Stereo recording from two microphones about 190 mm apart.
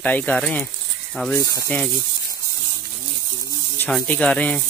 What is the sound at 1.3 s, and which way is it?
Speech, 15° left (ahead or behind).